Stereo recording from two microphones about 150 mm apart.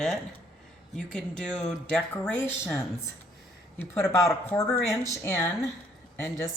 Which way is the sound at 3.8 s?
15° left (ahead or behind).